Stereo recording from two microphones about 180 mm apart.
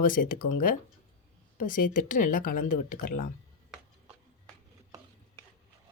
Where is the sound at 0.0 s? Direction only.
50° left (ahead or behind).